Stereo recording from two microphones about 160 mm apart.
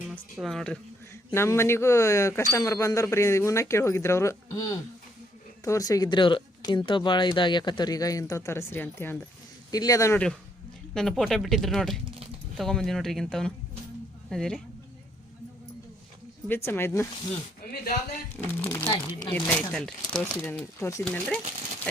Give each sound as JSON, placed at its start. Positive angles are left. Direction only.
{"t": 0.1, "sound": "speech", "side_deg": 0}
{"t": 1.3, "sound": "speech", "side_deg": 15}
{"t": 10.9, "sound": "speech", "side_deg": 0}
{"t": 16.6, "sound": "speech", "side_deg": 15}
{"t": 18.6, "sound": "speech", "side_deg": 20}
{"t": 19.3, "sound": "speech", "side_deg": 10}
{"t": 21.0, "sound": "speech", "side_deg": 5}